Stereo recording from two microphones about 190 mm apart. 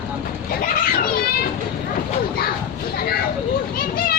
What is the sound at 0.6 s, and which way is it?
Children playing, 55° left (ahead or behind).